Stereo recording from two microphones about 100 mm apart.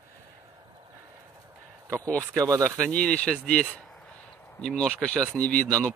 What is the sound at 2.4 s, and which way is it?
Speech, 35° right (ahead or behind).